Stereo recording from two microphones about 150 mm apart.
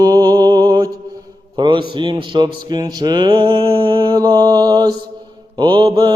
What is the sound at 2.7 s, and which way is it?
Mantra, 25° right (ahead or behind).